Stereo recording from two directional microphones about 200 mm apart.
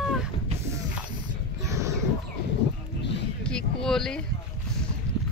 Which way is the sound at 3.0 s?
60° left (ahead or behind).